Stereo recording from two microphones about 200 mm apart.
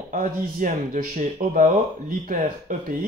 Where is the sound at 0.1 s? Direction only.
40° right (ahead or behind).